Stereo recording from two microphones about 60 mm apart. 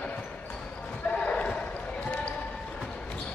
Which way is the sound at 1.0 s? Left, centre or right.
Centre.